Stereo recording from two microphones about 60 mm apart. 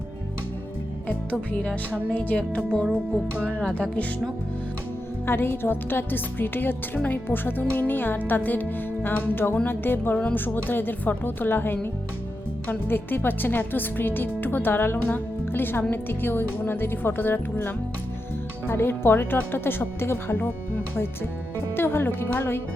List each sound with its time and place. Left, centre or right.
1.0 s speech: left
3.4 s speech: centre
5.2 s speech: left